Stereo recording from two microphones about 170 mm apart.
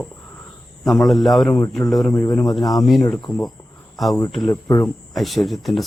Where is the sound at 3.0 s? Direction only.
25° left (ahead or behind).